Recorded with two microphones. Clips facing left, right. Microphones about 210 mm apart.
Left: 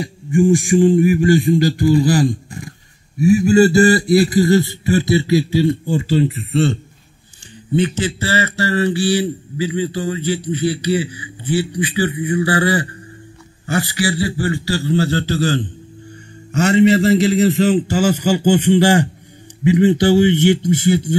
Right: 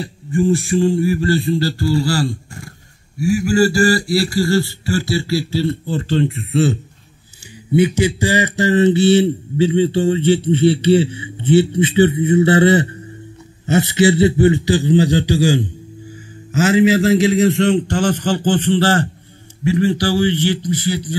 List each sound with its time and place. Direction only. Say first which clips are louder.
0.0 s a man's voice: left 3 dB; 15° left (ahead or behind)